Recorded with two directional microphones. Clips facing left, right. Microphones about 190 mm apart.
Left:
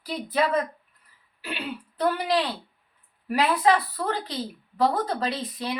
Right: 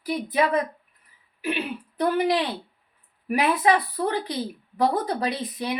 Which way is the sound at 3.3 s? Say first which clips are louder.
Right 1 dB; 20° right (ahead or behind).